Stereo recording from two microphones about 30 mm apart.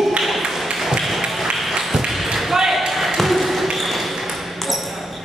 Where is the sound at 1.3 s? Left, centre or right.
Centre.